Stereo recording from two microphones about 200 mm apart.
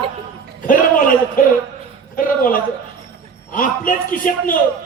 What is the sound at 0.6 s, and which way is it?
Speech, 45° left (ahead or behind).